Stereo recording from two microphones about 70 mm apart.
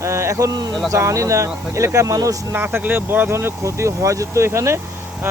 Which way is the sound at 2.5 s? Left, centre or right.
Right.